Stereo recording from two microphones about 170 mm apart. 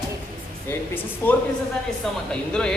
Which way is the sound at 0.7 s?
10° left (ahead or behind).